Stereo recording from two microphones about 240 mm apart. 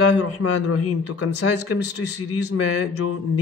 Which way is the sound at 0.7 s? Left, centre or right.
Left.